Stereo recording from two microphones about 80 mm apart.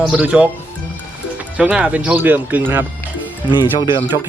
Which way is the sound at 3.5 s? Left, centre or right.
Left.